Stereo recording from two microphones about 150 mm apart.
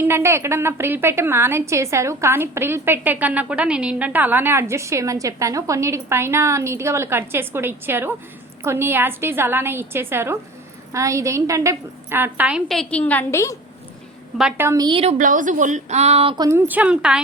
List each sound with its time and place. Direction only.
0.0 s a woman's voice: 15° right (ahead or behind); by 13.6 s 20° left (ahead or behind)
14.6 s a woman's voice: 25° right (ahead or behind)
15.0 s a woman's voice: 60° right (ahead or behind); by 16.3 s 45° right (ahead or behind)
16.3 s a woman's voice: 25° right (ahead or behind)
16.6 s a woman's voice: 10° right (ahead or behind)